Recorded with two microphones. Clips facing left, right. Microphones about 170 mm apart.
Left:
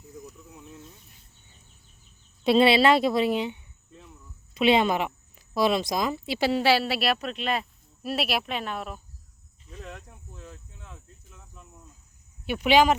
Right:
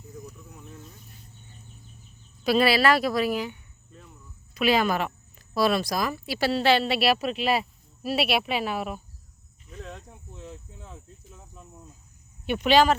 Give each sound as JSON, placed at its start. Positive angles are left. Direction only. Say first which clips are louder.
{"t": 2.4, "sound": "a woman's voice", "louder": "left 2 dB", "side_deg": 25}
{"t": 9.9, "sound": "a sound", "louder": "right 1 dB", "side_deg": 0}
{"t": 12.5, "sound": "a woman's voice", "louder": "even", "side_deg": 10}